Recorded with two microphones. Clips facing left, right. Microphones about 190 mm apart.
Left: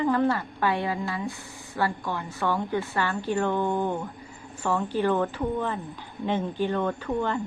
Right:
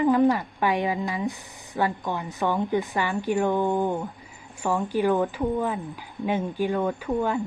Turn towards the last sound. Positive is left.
turn(degrees=-10)  # may be behind; listen again after turning